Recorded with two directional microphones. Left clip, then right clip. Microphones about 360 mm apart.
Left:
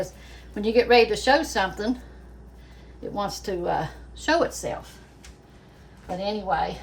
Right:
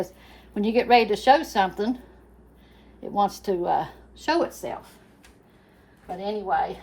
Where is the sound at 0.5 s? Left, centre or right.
Centre.